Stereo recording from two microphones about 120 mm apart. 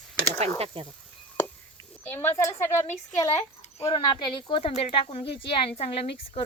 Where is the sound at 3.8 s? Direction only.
45° left (ahead or behind).